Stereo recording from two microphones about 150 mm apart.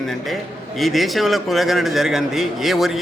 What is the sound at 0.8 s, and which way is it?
A man's voice, centre (ahead or behind).